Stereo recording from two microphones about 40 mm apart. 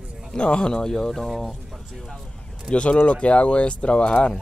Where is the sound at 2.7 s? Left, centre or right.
Left.